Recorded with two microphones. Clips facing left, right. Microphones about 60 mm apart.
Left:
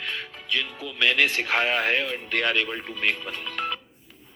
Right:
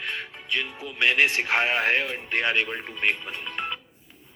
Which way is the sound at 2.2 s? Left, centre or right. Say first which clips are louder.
Even; right.